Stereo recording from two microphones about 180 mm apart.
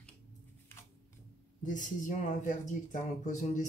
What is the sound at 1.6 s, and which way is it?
Speech, 45° left (ahead or behind).